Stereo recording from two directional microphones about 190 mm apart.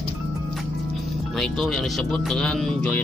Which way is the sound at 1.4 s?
Centre (ahead or behind).